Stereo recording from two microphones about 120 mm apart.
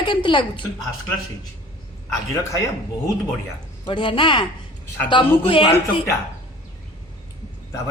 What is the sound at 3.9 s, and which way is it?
A woman's voice, 45° left (ahead or behind).